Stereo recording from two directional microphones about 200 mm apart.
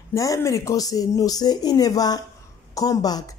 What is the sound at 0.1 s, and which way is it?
Speech, 15° left (ahead or behind).